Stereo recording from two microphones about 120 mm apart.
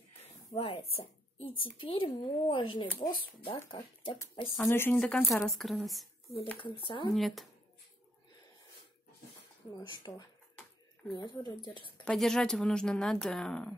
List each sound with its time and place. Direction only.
0.6 s a woman's voice: 55° left (ahead or behind)
4.6 s speech: 20° left (ahead or behind)
4.9 s speech: 5° left (ahead or behind)
6.6 s speech: 45° left (ahead or behind)
7.2 s speech: centre (ahead or behind)
9.8 s speech: 35° left (ahead or behind)
11.6 s speech: 45° left (ahead or behind)
12.0 s speech: 5° left (ahead or behind)